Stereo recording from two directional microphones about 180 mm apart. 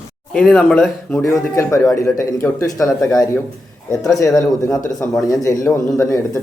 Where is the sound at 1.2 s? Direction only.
15° left (ahead or behind).